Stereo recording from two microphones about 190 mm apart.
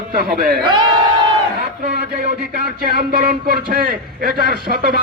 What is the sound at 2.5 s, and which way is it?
A man's voice, 50° right (ahead or behind).